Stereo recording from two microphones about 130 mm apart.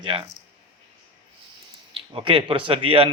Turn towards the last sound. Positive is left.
turn(degrees=-45)  # may be behind; listen again after turning